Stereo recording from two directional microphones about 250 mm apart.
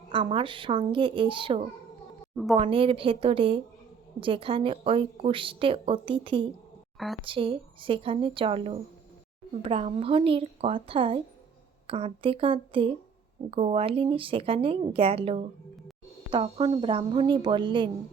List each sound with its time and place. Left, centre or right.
0.1 s a woman's voice: centre
2.3 s a woman's voice: centre
2.6 s a woman's voice: right